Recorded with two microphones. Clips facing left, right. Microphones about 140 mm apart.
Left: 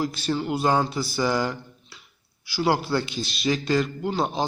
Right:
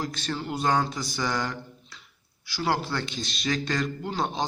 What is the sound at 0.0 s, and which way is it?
A man's voice, 10° left (ahead or behind).